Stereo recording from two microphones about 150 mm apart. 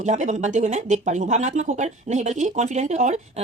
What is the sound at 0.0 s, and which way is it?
Speech, 55° right (ahead or behind).